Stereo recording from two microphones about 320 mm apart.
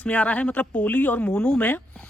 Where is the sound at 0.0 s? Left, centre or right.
Centre.